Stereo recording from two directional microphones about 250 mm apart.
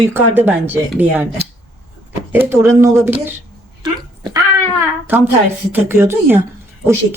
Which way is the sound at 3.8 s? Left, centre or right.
Centre.